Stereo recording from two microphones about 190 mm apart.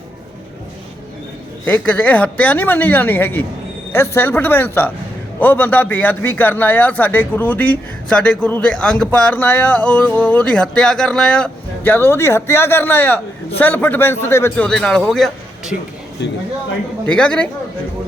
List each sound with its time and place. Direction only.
1.6 s a man's voice: 10° left (ahead or behind)
16.2 s a man's voice: 65° left (ahead or behind)
17.1 s speech: 5° left (ahead or behind)